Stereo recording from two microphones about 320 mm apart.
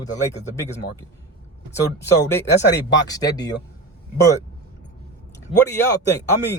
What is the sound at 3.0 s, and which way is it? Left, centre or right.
Speech, centre.